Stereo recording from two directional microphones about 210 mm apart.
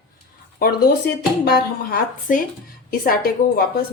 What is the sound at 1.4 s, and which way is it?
A woman's voice, 45° left (ahead or behind).